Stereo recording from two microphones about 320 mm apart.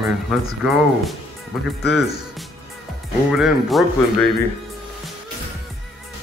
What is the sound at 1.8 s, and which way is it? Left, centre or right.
Speech, left.